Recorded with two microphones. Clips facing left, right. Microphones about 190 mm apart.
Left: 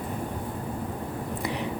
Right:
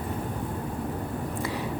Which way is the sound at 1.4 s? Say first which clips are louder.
Left 2 dB; 20° left (ahead or behind).